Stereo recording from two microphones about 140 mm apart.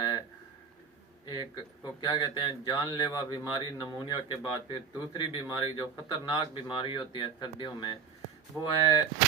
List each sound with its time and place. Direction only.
0.0 s a sound: 30° left (ahead or behind)
1.2 s speech: 35° left (ahead or behind)
8.5 s speech: 15° left (ahead or behind)